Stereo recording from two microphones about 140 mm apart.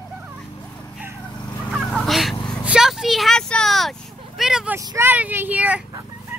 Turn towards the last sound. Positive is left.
turn(degrees=-10)  # may be behind; listen again after turning